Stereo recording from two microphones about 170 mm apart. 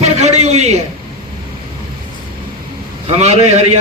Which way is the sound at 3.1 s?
40° right (ahead or behind).